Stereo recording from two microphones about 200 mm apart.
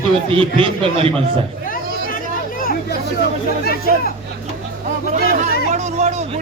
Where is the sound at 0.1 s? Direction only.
25° right (ahead or behind).